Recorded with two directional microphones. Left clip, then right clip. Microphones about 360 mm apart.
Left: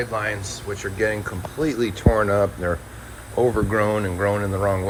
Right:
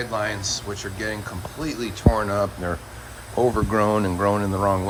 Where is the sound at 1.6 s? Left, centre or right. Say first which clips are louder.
Left 6 dB; right.